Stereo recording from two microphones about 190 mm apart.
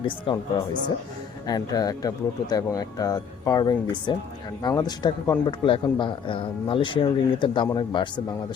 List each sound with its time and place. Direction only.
0.0 s speech: 25° left (ahead or behind)